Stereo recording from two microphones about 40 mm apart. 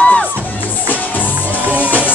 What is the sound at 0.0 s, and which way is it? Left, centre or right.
Music, left.